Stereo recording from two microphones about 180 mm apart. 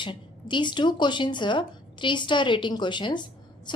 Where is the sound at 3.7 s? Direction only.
25° left (ahead or behind).